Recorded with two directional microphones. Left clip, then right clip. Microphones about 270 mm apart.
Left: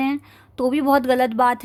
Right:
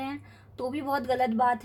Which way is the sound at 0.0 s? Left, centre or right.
Left.